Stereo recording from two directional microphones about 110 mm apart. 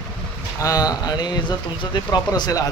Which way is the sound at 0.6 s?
35° left (ahead or behind).